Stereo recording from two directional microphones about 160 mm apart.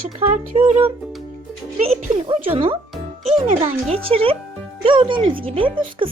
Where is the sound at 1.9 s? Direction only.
40° right (ahead or behind).